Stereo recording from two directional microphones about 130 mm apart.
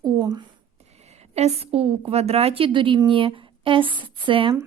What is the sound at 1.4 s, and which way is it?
A woman's voice, 55° right (ahead or behind).